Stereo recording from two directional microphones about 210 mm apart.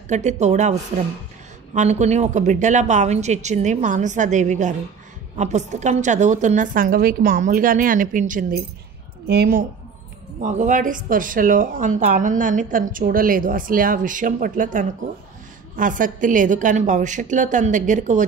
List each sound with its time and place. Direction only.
0.1 s a woman's voice: 35° right (ahead or behind)